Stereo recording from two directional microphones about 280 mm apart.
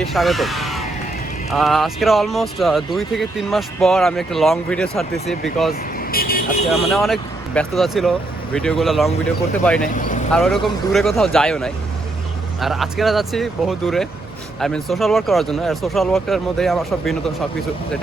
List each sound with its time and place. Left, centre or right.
0.0 s speech: centre
6.0 s vehicle: left
6.7 s speech: centre
9.9 s speech: left
10.3 s speech: centre